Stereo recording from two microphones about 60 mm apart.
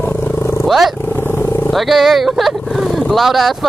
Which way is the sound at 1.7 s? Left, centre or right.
Centre.